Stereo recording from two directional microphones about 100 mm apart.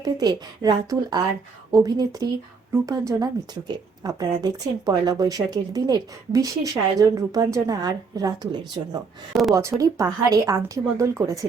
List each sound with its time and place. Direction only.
0.0 s speech: 40° right (ahead or behind)
3.1 s speech: 40° right (ahead or behind)
9.3 s speech: centre (ahead or behind)
9.6 s speech: 30° right (ahead or behind)